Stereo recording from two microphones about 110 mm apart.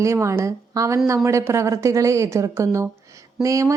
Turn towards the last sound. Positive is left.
turn(degrees=-30)  # may be behind; listen again after turning